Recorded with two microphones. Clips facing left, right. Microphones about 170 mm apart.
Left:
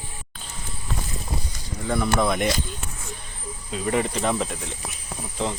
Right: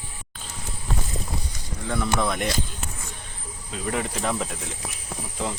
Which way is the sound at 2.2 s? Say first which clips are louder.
Left 3 dB; 5° left (ahead or behind).